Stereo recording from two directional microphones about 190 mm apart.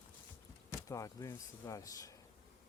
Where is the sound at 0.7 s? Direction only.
15° left (ahead or behind).